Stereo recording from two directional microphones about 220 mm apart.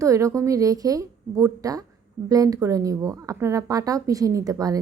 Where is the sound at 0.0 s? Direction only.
15° right (ahead or behind).